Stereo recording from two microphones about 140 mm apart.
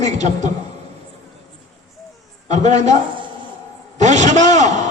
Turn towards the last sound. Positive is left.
turn(degrees=-60)  # may be behind; listen again after turning